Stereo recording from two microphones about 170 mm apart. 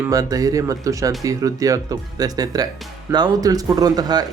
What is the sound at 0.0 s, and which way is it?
Speech, 20° right (ahead or behind).